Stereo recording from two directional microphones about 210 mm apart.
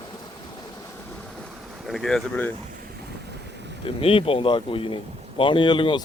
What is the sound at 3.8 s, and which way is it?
Speech, 25° left (ahead or behind).